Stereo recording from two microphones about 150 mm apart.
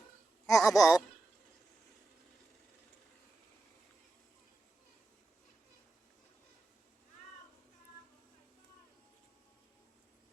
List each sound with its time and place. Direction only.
0.4 s laughter: 20° left (ahead or behind)